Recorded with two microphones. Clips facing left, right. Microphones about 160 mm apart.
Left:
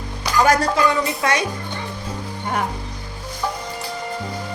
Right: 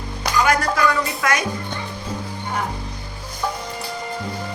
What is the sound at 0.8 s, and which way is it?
Speech, 25° left (ahead or behind).